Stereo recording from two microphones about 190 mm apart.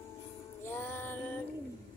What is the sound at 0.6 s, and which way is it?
Music, 10° left (ahead or behind).